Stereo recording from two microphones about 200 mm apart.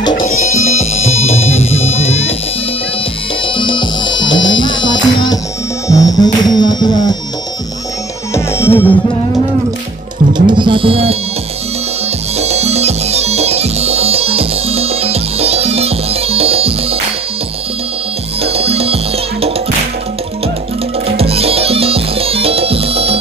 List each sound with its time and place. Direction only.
0.4 s music: 35° left (ahead or behind)
3.4 s music: 25° left (ahead or behind)
8.4 s music: 10° left (ahead or behind)
10.3 s music: 25° right (ahead or behind)
12.4 s music: 30° right (ahead or behind)
18.4 s music: 30° right (ahead or behind)
21.2 s music: 30° right (ahead or behind)